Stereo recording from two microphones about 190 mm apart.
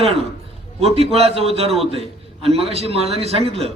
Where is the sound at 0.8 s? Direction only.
30° right (ahead or behind).